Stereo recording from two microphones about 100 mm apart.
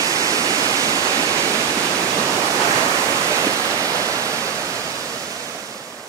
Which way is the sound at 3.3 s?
35° right (ahead or behind).